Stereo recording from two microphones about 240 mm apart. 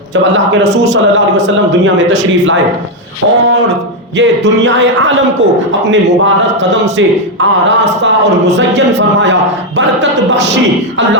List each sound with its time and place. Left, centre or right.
0.8 s a man's voice: right
4.2 s a man's voice: right
8.5 s a man's voice: right